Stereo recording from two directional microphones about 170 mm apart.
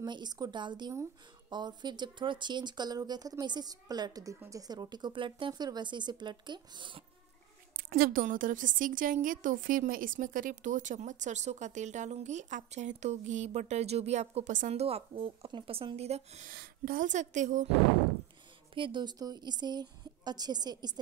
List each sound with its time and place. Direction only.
0.0 s speech: 25° right (ahead or behind)
7.7 s a woman's voice: 60° right (ahead or behind); by 16.4 s 40° right (ahead or behind)
16.4 s a woman's voice: 55° right (ahead or behind)
18.8 s speech: 25° right (ahead or behind)